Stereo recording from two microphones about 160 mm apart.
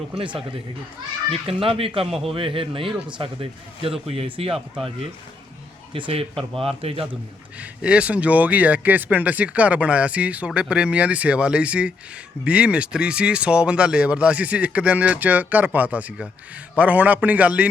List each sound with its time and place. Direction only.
1.3 s a man's voice: 35° right (ahead or behind)
5.9 s a man's voice: 35° right (ahead or behind)
7.6 s speech: 5° right (ahead or behind)